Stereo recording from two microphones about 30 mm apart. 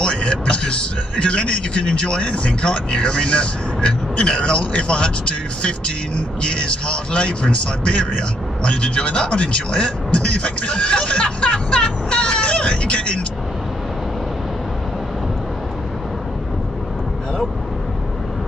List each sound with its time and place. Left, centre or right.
0.0 s a man's voice: left